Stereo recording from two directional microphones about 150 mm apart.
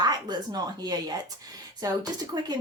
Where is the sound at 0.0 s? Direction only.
25° right (ahead or behind).